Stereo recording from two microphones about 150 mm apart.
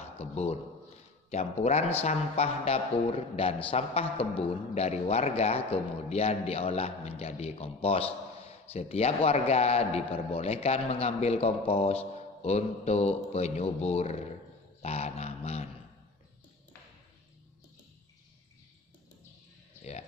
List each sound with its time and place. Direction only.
0.2 s speech: 45° left (ahead or behind)
1.6 s a man's voice: 45° left (ahead or behind)